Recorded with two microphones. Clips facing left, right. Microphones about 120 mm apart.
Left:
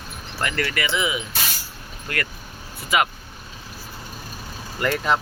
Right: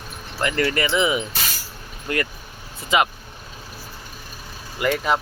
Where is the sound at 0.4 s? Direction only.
25° right (ahead or behind).